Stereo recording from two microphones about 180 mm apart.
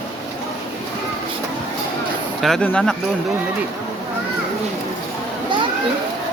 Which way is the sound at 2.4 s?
5° left (ahead or behind).